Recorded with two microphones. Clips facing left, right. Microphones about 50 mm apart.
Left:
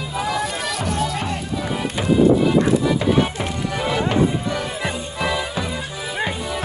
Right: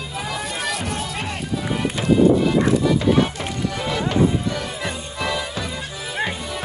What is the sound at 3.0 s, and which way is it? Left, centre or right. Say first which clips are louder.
Music: even; centre.